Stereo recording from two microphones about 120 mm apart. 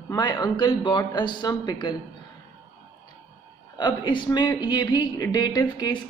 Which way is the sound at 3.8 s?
40° left (ahead or behind).